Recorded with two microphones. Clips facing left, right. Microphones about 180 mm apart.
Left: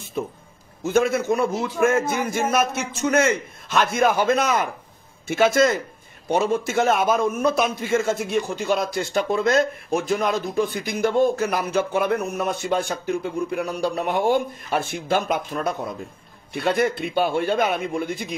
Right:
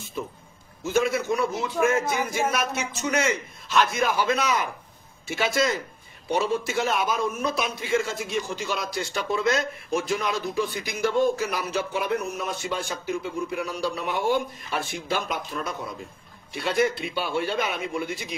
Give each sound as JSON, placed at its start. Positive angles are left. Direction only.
{"t": 0.2, "sound": "a man's voice", "side_deg": 55}